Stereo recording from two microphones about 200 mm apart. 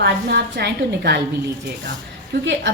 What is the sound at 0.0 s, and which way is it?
A woman's voice, 60° right (ahead or behind).